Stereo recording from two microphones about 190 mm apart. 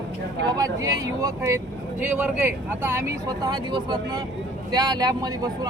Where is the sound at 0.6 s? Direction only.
15° right (ahead or behind).